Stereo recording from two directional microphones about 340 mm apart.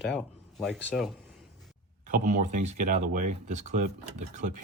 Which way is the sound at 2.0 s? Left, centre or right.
Right.